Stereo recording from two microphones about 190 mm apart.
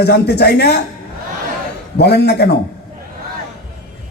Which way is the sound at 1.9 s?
60° left (ahead or behind).